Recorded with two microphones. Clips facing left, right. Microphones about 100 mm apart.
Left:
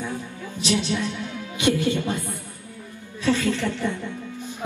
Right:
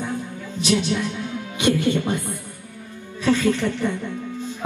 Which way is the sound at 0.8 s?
20° right (ahead or behind).